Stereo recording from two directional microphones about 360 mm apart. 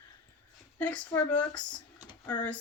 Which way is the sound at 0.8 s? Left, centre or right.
Centre.